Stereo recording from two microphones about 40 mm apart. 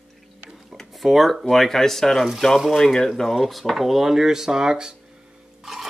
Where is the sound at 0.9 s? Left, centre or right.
Centre.